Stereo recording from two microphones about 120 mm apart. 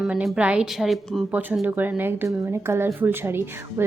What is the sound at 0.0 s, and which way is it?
A woman's voice, 5° right (ahead or behind).